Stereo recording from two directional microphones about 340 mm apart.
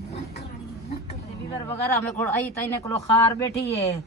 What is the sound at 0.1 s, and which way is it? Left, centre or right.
Vehicle, left.